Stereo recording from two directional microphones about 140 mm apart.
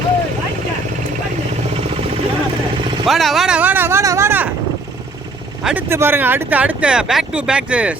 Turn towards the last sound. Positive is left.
turn(degrees=-5)  # may be behind; listen again after turning